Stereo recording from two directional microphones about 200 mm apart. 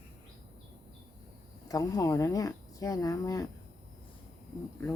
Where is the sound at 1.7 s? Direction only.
15° left (ahead or behind).